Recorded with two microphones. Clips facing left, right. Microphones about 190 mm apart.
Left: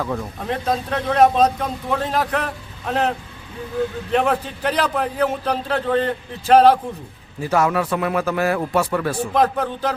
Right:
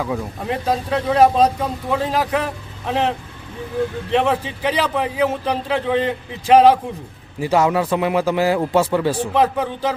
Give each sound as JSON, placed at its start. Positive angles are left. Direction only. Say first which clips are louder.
{"t": 0.0, "sound": "speech", "louder": "right 1 dB", "side_deg": -10}
{"t": 4.1, "sound": "a man's voice", "louder": "right 1 dB", "side_deg": 0}
{"t": 4.6, "sound": "speech", "louder": "right 1 dB", "side_deg": -10}
{"t": 7.4, "sound": "a man's voice", "louder": "right 2 dB", "side_deg": -20}
{"t": 9.3, "sound": "speech", "louder": "left 2 dB", "side_deg": -10}